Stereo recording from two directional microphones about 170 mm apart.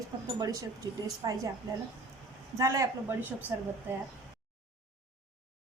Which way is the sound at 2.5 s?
20° right (ahead or behind).